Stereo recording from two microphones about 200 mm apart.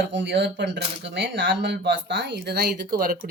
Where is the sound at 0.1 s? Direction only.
60° right (ahead or behind).